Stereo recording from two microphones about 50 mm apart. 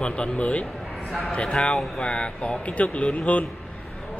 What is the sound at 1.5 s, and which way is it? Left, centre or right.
Speech, centre.